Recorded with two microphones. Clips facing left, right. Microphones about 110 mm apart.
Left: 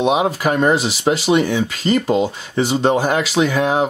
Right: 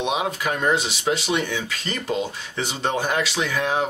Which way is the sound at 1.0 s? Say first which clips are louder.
Left 10 dB; 35° left (ahead or behind).